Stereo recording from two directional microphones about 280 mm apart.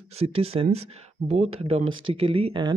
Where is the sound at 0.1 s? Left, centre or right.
Right.